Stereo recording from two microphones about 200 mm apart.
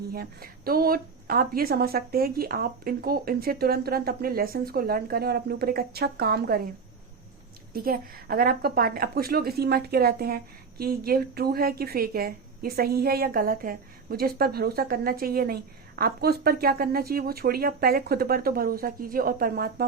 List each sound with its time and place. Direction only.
0.1 s a woman's voice: 50° right (ahead or behind)
7.7 s a woman's voice: 45° right (ahead or behind)